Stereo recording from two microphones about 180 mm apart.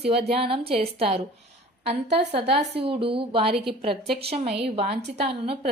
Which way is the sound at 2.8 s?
30° right (ahead or behind).